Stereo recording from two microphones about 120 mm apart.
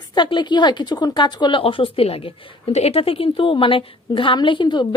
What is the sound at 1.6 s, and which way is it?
A woman's voice, 50° left (ahead or behind).